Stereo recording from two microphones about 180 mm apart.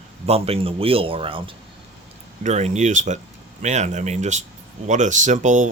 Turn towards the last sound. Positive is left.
turn(degrees=-40)  # may be behind; listen again after turning